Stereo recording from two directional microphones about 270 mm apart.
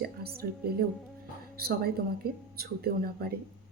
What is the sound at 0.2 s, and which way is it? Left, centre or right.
A woman's voice, right.